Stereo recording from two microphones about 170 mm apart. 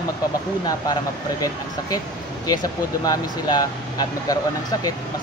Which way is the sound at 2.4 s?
20° left (ahead or behind).